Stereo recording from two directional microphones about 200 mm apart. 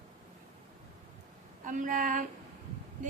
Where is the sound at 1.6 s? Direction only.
40° right (ahead or behind).